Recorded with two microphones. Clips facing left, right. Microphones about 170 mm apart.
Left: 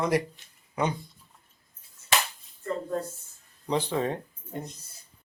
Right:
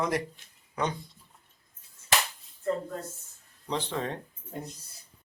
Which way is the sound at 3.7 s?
10° left (ahead or behind).